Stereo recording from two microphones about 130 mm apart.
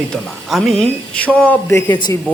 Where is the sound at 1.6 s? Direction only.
20° left (ahead or behind).